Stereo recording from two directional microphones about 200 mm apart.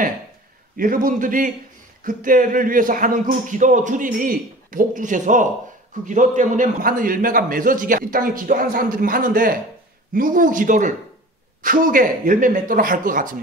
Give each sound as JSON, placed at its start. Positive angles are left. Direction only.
{"t": 0.7, "sound": "a man's voice", "side_deg": -45}